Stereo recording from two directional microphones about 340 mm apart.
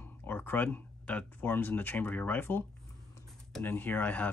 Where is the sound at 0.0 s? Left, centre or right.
Centre.